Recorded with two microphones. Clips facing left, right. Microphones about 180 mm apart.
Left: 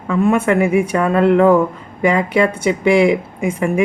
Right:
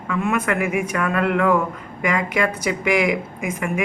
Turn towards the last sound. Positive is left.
turn(degrees=30)  # may be behind; listen again after turning